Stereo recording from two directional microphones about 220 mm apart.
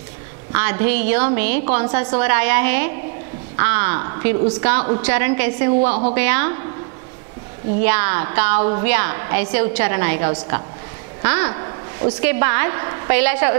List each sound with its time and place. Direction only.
0.5 s a woman's voice: 15° right (ahead or behind)
1.7 s a woman's voice: 30° right (ahead or behind)
2.0 s a woman's voice: 15° right (ahead or behind)
5.8 s a woman's voice: 30° right (ahead or behind)
6.1 s a woman's voice: 10° right (ahead or behind)
7.8 s a woman's voice: 10° right (ahead or behind)
8.5 s a woman's voice: 25° right (ahead or behind)
8.8 s a woman's voice: 15° right (ahead or behind)
11.4 s a sound: 25° right (ahead or behind)
12.2 s a woman's voice: 15° right (ahead or behind)